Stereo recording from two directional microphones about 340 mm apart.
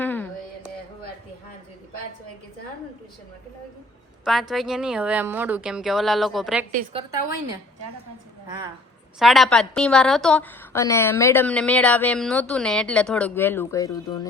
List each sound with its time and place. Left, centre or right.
0.0 s a sound: centre
4.2 s a woman's voice: centre
6.7 s a woman's voice: right
9.1 s a woman's voice: centre